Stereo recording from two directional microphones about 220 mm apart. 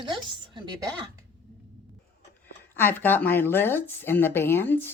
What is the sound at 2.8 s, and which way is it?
Speech, 10° left (ahead or behind).